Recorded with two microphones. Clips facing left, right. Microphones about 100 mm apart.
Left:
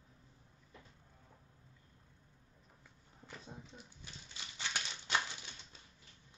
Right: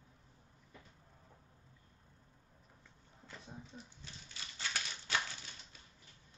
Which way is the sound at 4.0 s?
20° left (ahead or behind).